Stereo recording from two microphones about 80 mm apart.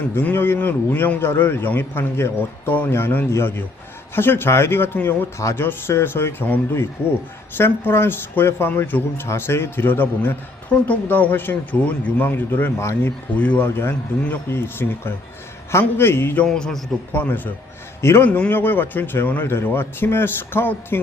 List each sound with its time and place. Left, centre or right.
0.2 s speech: left
5.4 s speech: left
5.6 s speech: left
13.3 s speech: centre
13.7 s speech: left
16.5 s a man's voice: centre
17.1 s speech: left
18.3 s speech: centre